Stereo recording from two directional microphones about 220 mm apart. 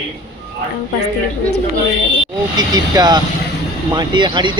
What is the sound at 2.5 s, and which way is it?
Speech, 20° right (ahead or behind).